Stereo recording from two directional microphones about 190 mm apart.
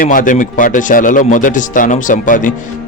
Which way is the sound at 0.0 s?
45° left (ahead or behind).